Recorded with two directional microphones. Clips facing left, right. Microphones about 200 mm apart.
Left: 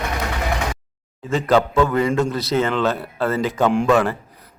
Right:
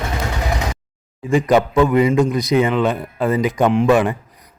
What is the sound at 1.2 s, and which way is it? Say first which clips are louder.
A man's voice: right 3 dB; 15° right (ahead or behind).